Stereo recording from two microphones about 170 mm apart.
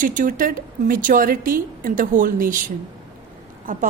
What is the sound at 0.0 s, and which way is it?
A woman's voice, 50° right (ahead or behind).